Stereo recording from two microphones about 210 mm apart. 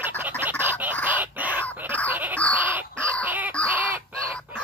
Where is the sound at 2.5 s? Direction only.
10° right (ahead or behind).